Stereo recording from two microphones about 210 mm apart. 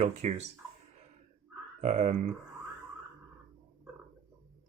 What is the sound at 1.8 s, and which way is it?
Speech, 35° right (ahead or behind).